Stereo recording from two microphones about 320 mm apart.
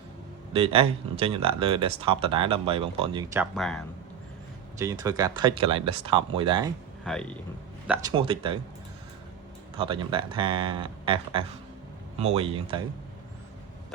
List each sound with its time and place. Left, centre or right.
0.5 s speech: centre
3.5 s speech: centre
4.8 s speech: centre
7.0 s speech: centre
7.9 s speech: centre
9.7 s speech: centre